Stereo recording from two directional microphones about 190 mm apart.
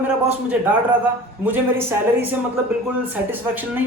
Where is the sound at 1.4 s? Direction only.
10° right (ahead or behind).